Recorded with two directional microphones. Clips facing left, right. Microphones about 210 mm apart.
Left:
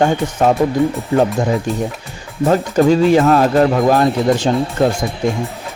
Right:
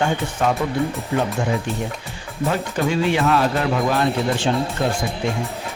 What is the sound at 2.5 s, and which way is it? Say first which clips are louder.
Speech: left 10 dB; 40° left (ahead or behind).